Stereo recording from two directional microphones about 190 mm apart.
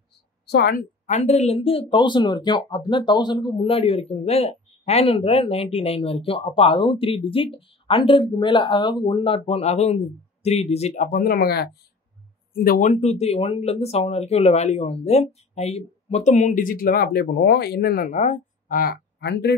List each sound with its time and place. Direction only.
0.5 s speech: 55° left (ahead or behind)